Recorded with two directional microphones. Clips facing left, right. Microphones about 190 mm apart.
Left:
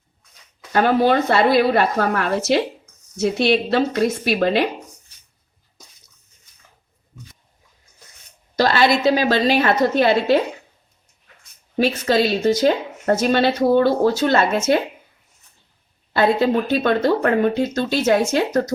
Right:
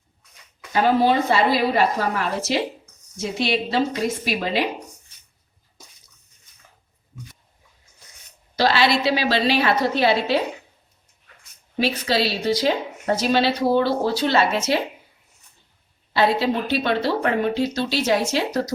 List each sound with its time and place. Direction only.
0.7 s a woman's voice: 60° left (ahead or behind)
8.5 s speech: 45° left (ahead or behind)
11.8 s speech: 45° left (ahead or behind)
16.1 s speech: 50° left (ahead or behind)